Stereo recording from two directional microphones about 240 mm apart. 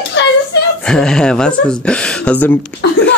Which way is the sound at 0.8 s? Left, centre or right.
Centre.